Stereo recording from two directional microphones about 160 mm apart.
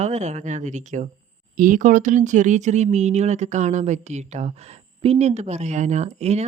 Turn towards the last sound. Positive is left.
turn(degrees=-45)  # may be behind; listen again after turning